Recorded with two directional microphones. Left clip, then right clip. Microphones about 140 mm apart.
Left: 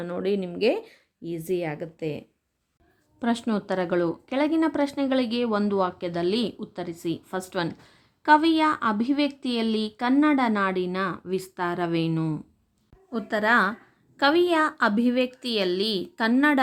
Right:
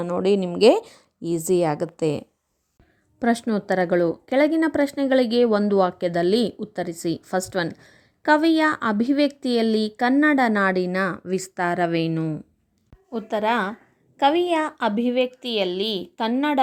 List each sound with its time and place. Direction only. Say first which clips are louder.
0.0 s speech: right 6 dB; 30° right (ahead or behind)
3.2 s speech: right 4 dB; 30° right (ahead or behind)
13.1 s a woman's voice: even; 5° right (ahead or behind)